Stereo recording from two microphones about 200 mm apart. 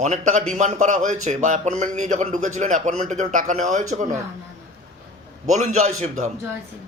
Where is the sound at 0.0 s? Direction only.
40° right (ahead or behind).